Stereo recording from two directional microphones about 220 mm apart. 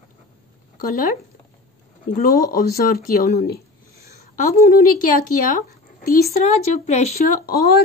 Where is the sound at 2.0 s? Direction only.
40° left (ahead or behind).